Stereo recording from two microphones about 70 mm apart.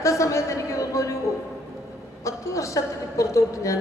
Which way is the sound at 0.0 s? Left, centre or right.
Left.